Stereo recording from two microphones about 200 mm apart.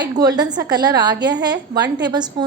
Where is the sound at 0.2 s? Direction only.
20° right (ahead or behind).